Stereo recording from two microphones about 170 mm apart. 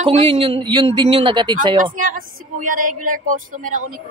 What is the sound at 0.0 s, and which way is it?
A man's voice, 35° right (ahead or behind).